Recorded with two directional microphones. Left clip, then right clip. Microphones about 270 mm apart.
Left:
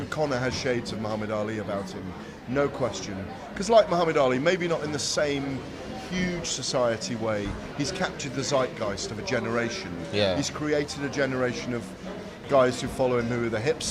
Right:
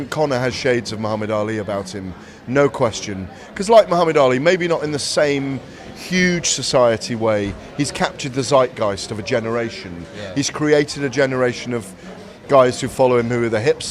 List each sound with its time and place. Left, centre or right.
0.1 s a man's voice: right
10.3 s speech: right